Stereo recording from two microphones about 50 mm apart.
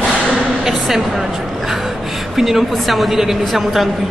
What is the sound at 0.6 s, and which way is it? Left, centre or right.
Speech, centre.